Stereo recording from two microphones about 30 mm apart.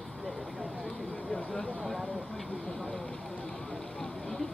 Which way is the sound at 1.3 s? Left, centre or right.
Left.